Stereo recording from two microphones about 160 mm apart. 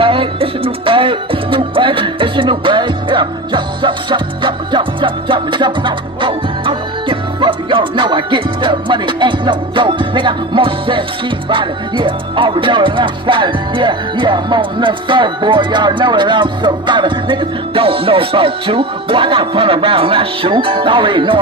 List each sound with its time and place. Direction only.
0.0 s music: 35° right (ahead or behind)